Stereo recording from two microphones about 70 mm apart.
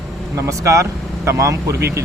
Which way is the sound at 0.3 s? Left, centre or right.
Right.